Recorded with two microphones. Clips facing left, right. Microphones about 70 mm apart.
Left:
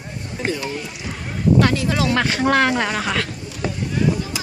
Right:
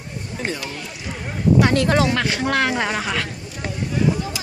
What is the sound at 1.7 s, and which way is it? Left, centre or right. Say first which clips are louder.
Speech: right 4 dB; right.